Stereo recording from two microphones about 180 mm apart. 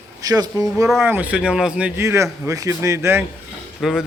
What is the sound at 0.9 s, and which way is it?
Speech, 5° right (ahead or behind).